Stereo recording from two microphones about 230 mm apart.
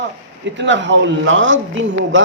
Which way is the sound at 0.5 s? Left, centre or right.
Right.